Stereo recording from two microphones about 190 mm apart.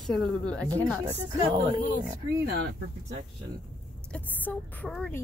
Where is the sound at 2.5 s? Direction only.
65° right (ahead or behind).